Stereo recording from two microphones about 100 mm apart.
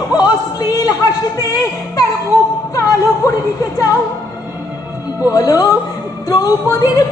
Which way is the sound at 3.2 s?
35° left (ahead or behind).